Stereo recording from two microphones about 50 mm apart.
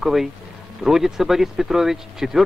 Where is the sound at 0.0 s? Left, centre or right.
Centre.